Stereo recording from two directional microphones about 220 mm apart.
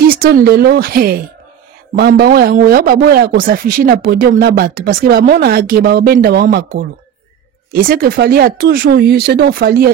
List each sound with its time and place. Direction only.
0.1 s speech: 40° right (ahead or behind)
7.8 s speech: 45° right (ahead or behind)